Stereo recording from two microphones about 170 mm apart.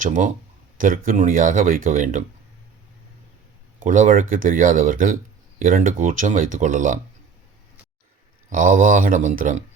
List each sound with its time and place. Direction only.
0.0 s speech: 50° right (ahead or behind)
3.8 s speech: 50° right (ahead or behind)
8.4 s speech: 50° right (ahead or behind)